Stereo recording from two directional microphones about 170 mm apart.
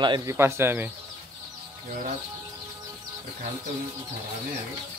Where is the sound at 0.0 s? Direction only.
25° right (ahead or behind).